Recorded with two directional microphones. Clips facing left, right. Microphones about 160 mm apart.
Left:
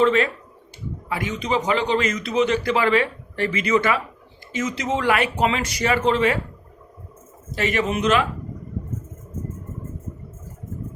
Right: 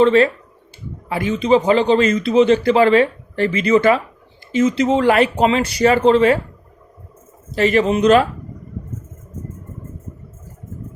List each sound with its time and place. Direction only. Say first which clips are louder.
0.0 s a man's voice: right 6 dB; 30° right (ahead or behind)
7.5 s a man's voice: right 7 dB; 35° right (ahead or behind)